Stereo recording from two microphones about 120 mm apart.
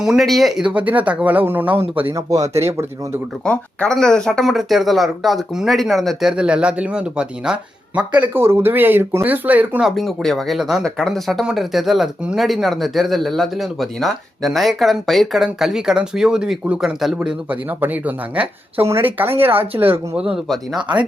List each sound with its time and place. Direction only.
0.0 s speech: centre (ahead or behind); by 3.1 s 20° right (ahead or behind)
3.4 s speech: 10° left (ahead or behind); by 9.8 s 15° right (ahead or behind)
9.8 s speech: centre (ahead or behind); by 19.6 s 20° right (ahead or behind)
20.1 s speech: 5° right (ahead or behind)